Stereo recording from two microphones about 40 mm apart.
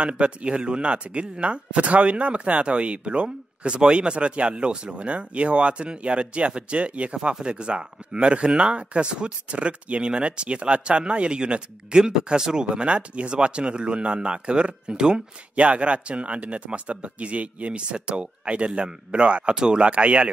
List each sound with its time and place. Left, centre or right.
0.0 s speech: right
19.8 s speech: right